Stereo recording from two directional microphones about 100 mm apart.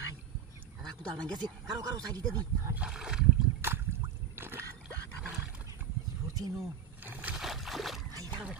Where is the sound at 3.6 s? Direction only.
25° right (ahead or behind).